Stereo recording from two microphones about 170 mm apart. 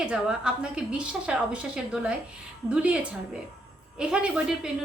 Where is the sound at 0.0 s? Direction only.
5° right (ahead or behind).